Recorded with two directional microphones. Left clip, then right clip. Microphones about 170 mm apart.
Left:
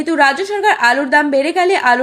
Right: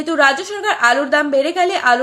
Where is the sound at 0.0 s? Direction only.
20° left (ahead or behind).